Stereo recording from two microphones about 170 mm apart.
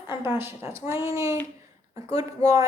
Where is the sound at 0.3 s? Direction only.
15° right (ahead or behind).